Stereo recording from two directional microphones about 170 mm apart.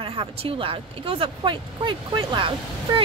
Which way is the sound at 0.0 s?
30° right (ahead or behind).